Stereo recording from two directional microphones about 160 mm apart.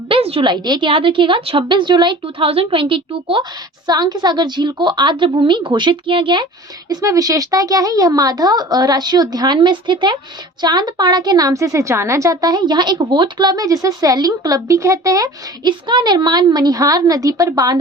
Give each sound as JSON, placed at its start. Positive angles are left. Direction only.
{"t": 0.1, "sound": "a woman's voice", "side_deg": -35}